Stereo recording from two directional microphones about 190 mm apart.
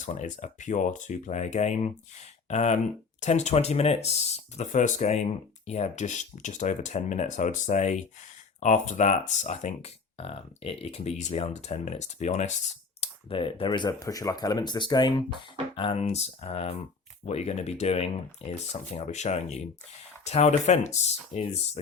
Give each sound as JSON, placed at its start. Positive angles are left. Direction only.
{"t": 0.0, "sound": "speech", "side_deg": 35}
{"t": 13.0, "sound": "speech", "side_deg": 30}